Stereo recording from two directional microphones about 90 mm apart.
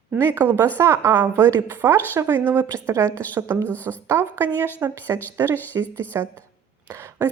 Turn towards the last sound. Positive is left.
turn(degrees=-30)  # may be behind; listen again after turning